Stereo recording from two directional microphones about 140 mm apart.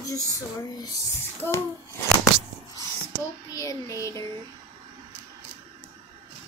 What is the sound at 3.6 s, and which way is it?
Child singing, 25° left (ahead or behind).